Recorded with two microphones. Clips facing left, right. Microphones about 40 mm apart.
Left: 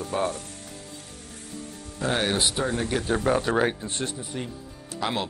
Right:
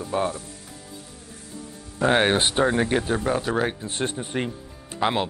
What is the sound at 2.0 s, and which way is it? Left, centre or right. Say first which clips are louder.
Speech: right 6 dB; right.